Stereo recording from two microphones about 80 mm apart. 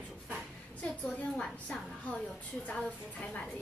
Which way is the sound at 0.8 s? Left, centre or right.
Centre.